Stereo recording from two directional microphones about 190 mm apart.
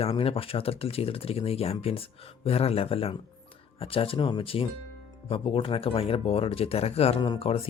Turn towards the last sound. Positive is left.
turn(degrees=30)  # may be behind; listen again after turning